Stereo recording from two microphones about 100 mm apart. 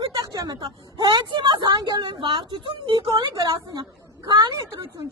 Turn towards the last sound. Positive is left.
turn(degrees=-55)  # may be behind; listen again after turning